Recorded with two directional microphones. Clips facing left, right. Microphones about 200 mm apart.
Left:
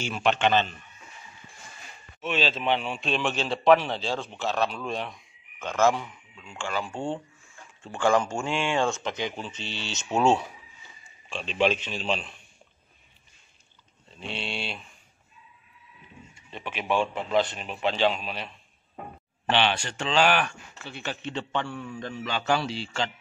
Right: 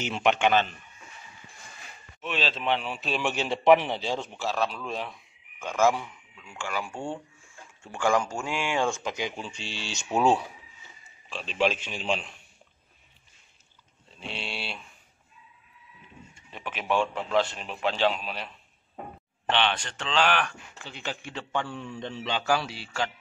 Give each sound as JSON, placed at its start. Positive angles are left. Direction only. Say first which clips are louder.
{"t": 0.0, "sound": "a man's voice", "louder": "even", "side_deg": -15}
{"t": 2.2, "sound": "a man's voice", "louder": "left 2 dB", "side_deg": 0}
{"t": 14.2, "sound": "speech", "louder": "left 3 dB", "side_deg": 0}
{"t": 16.4, "sound": "a sound", "louder": "left 1 dB", "side_deg": -5}
{"t": 16.7, "sound": "speech", "louder": "even", "side_deg": 10}
{"t": 17.8, "sound": "speech", "louder": "left 1 dB", "side_deg": 0}
{"t": 19.5, "sound": "speech", "louder": "left 2 dB", "side_deg": 10}
{"t": 20.8, "sound": "a man's voice", "louder": "left 2 dB", "side_deg": -15}
{"t": 21.8, "sound": "speech", "louder": "even", "side_deg": 5}
{"t": 22.1, "sound": "a man's voice", "louder": "right 1 dB", "side_deg": -25}
{"t": 22.5, "sound": "speech", "louder": "left 2 dB", "side_deg": -5}